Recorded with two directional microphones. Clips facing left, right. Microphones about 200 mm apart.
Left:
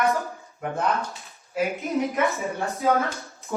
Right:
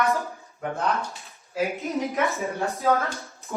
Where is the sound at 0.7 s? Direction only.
Centre (ahead or behind).